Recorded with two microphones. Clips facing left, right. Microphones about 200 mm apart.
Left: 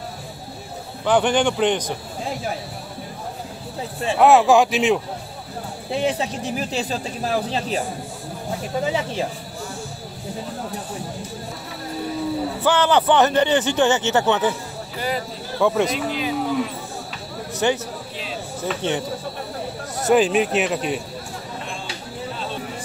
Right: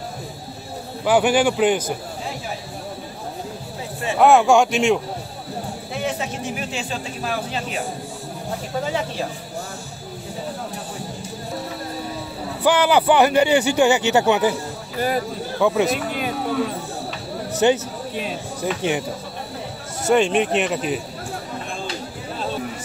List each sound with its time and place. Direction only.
1.0 s a man's voice: 10° right (ahead or behind)
4.2 s a man's voice: centre (ahead or behind)
5.9 s speech: 30° left (ahead or behind)
12.6 s a man's voice: 10° right (ahead or behind)
15.0 s speech: 50° right (ahead or behind)
15.6 s a man's voice: 5° right (ahead or behind)
16.1 s speech: 50° right (ahead or behind)
17.5 s a sound: 20° right (ahead or behind)
18.6 s a man's voice: 10° right (ahead or behind)
20.1 s a man's voice: centre (ahead or behind)